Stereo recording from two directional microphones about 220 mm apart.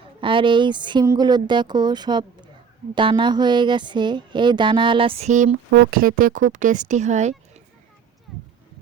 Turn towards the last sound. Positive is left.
turn(degrees=-30)  # may be behind; listen again after turning